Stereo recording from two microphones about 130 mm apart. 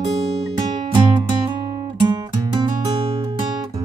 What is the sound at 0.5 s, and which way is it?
Music, 35° right (ahead or behind).